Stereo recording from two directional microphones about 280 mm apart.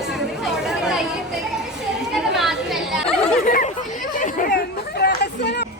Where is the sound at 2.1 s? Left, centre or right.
Centre.